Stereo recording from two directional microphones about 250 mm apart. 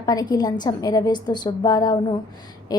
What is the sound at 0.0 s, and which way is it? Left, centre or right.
A woman's voice, centre.